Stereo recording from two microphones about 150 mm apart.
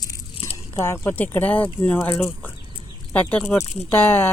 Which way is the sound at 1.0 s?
15° left (ahead or behind).